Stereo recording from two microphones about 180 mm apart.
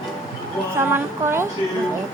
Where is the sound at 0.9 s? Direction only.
15° right (ahead or behind).